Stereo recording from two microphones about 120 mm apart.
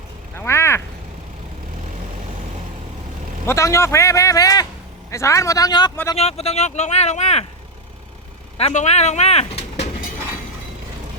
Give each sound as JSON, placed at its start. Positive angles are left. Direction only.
{"t": 0.3, "sound": "a sound", "side_deg": 20}
{"t": 3.4, "sound": "a man's voice", "side_deg": 25}
{"t": 6.1, "sound": "speech", "side_deg": 60}
{"t": 8.5, "sound": "speech", "side_deg": 65}